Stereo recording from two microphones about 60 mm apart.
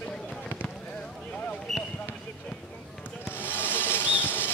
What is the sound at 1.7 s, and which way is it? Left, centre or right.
Basketball bounce, centre.